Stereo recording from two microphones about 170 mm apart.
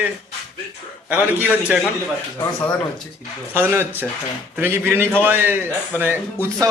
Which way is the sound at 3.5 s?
15° right (ahead or behind).